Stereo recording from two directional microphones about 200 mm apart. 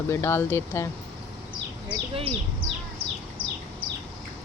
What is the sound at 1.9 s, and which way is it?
Speech, 30° right (ahead or behind).